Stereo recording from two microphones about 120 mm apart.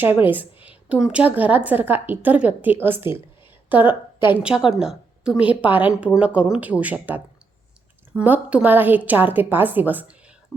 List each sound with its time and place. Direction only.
0.3 s a woman's voice: 15° right (ahead or behind)